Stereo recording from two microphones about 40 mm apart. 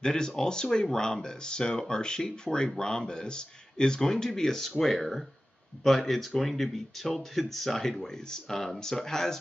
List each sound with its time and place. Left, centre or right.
0.0 s speech: centre